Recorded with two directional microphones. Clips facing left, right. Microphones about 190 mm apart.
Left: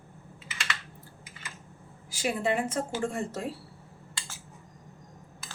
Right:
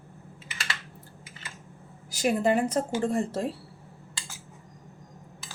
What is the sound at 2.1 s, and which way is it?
A woman's voice, 40° right (ahead or behind).